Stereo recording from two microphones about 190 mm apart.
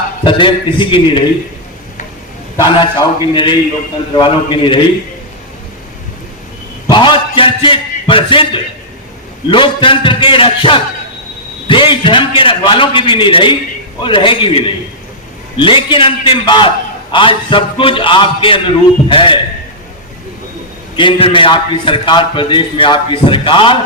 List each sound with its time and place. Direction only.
0.3 s a man's voice: 25° left (ahead or behind)
2.6 s a man's voice: 20° left (ahead or behind)
6.8 s a sound: 25° left (ahead or behind)
9.5 s a man's voice: 25° left (ahead or behind)
15.5 s a man's voice: 25° left (ahead or behind)
20.9 s a man's voice: 25° left (ahead or behind)